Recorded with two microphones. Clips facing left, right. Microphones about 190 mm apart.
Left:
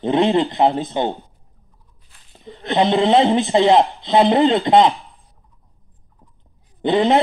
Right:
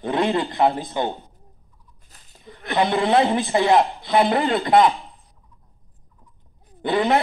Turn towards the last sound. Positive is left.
turn(degrees=20)  # may be behind; listen again after turning